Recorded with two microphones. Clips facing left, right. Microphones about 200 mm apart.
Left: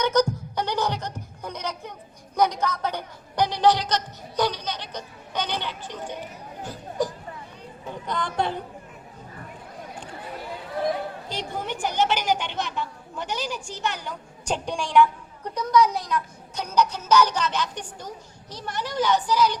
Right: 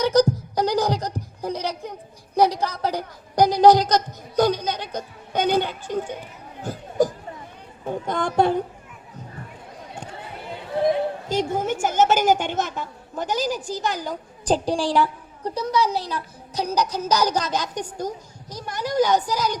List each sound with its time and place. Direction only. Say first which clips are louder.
0.0 s a sound: right 4 dB; 35° right (ahead or behind)
7.9 s speech: right 5 dB; 50° right (ahead or behind)
11.3 s a woman's voice: right 9 dB; 45° right (ahead or behind)